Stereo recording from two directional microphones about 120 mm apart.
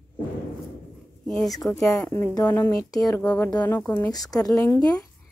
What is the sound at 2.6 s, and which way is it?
Speech, 25° left (ahead or behind).